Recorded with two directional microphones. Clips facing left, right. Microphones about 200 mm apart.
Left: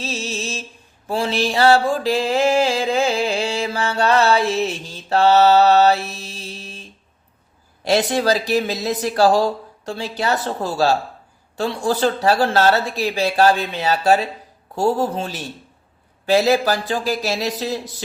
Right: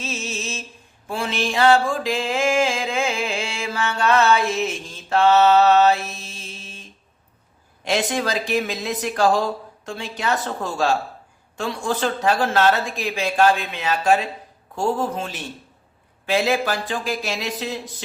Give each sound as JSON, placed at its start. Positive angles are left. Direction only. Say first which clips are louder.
{"t": 0.0, "sound": "music", "louder": "left 3 dB", "side_deg": 35}
{"t": 7.9, "sound": "speech", "louder": "left 5 dB", "side_deg": 35}